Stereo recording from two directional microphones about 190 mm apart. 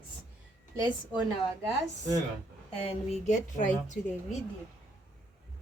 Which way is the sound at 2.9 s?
35° left (ahead or behind).